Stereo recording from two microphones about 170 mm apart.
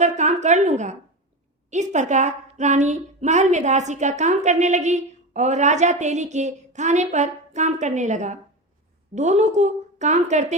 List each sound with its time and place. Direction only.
0.0 s a woman's voice: 40° right (ahead or behind)